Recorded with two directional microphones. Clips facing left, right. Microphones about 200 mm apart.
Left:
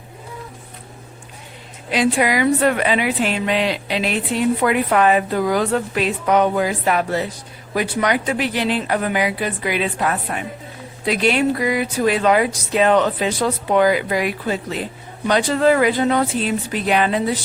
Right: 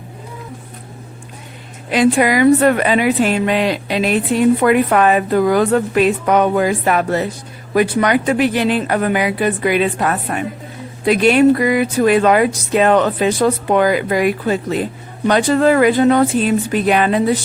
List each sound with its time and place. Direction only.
1.9 s a woman's voice: 50° right (ahead or behind)